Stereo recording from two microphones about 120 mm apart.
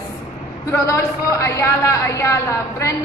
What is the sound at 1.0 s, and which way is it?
A woman's voice, 25° left (ahead or behind).